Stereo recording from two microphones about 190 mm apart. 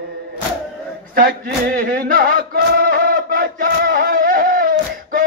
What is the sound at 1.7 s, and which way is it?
Singing, 45° right (ahead or behind).